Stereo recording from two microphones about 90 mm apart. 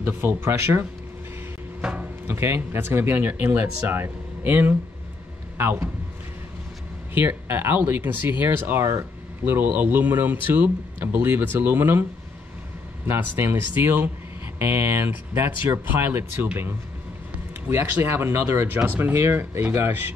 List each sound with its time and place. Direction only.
0.0 s speech: 25° right (ahead or behind)
1.8 s a sound: 10° right (ahead or behind)
2.2 s speech: 30° right (ahead or behind)
7.2 s speech: 25° right (ahead or behind)
17.6 s speech: 25° right (ahead or behind)